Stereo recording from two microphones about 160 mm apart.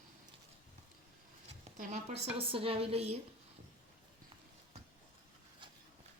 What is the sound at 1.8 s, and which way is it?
A woman's voice, 45° right (ahead or behind).